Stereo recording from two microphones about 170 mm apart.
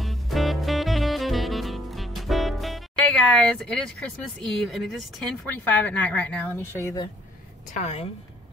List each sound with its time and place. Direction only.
0.0 s music: centre (ahead or behind)
4.8 s speech: 5° left (ahead or behind); by 7.1 s 20° left (ahead or behind)
7.7 s a woman's voice: 40° left (ahead or behind)